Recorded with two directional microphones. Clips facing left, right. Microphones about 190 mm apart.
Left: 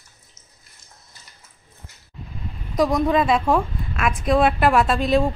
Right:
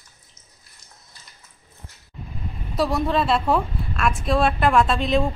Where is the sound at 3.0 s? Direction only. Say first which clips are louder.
Left 2 dB; 10° left (ahead or behind).